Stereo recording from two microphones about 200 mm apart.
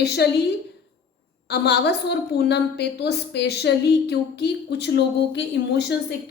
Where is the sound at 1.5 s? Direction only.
55° left (ahead or behind).